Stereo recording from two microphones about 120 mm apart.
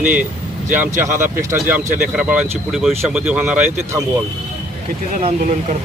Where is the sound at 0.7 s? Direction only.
20° right (ahead or behind).